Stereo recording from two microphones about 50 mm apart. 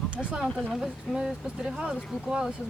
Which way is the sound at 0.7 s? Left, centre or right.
Centre.